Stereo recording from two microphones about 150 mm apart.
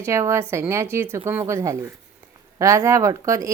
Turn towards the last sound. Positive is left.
turn(degrees=-20)  # may be behind; listen again after turning